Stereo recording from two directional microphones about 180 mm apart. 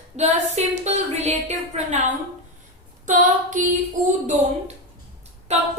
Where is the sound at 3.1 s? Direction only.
45° right (ahead or behind).